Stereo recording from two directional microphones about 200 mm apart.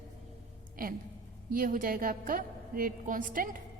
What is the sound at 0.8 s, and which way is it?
A woman's voice, 45° right (ahead or behind).